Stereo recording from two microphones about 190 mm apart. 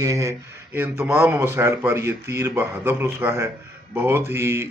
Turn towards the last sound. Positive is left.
turn(degrees=-10)  # may be behind; listen again after turning